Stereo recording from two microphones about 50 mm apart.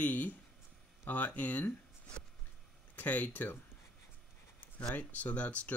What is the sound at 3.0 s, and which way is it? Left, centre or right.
Speech, left.